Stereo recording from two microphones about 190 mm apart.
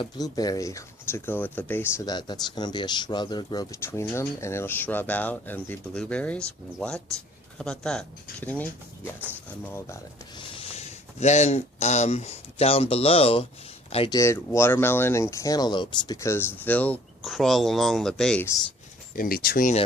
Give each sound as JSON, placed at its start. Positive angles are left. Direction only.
{"t": 0.0, "sound": "speech", "side_deg": 20}
{"t": 10.4, "sound": "speech", "side_deg": 30}
{"t": 14.2, "sound": "speech", "side_deg": 15}
{"t": 19.1, "sound": "speech", "side_deg": 50}